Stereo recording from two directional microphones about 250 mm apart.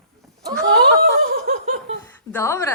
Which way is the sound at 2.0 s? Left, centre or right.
Centre.